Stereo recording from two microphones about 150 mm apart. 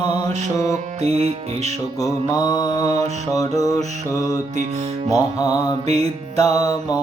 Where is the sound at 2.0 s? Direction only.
25° left (ahead or behind).